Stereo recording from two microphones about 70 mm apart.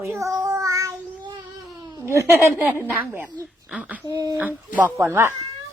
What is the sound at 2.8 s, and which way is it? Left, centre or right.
Speech, right.